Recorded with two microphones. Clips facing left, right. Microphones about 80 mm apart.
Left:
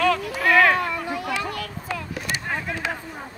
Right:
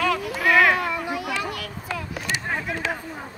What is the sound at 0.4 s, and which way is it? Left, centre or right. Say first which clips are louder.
Cat: even; centre.